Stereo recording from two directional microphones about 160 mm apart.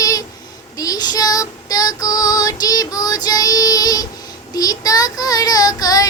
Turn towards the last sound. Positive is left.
turn(degrees=20)  # may be behind; listen again after turning